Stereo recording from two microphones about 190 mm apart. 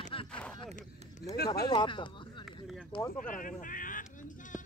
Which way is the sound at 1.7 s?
25° left (ahead or behind).